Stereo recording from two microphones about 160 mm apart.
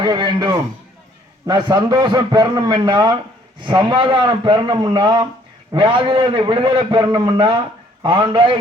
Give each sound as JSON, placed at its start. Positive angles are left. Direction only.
{"t": 0.0, "sound": "a man's voice", "side_deg": -25}